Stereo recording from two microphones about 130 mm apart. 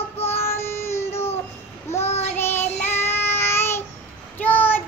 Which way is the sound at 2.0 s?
55° left (ahead or behind).